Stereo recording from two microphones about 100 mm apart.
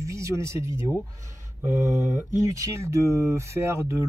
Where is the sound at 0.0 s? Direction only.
30° right (ahead or behind).